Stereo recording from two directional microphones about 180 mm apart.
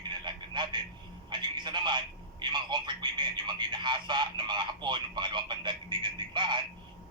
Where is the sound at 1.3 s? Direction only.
25° right (ahead or behind).